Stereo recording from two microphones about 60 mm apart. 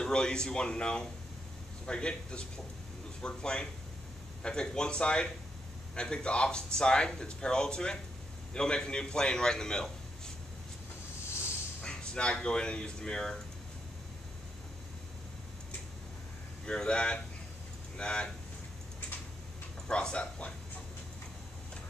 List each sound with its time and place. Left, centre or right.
0.0 s speech: centre
11.8 s speech: centre
16.6 s speech: centre
19.9 s speech: centre